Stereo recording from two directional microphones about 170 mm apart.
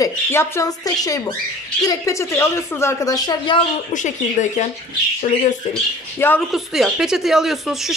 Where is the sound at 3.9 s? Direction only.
45° left (ahead or behind).